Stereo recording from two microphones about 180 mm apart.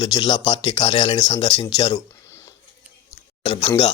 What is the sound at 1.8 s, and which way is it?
Speech, 30° left (ahead or behind).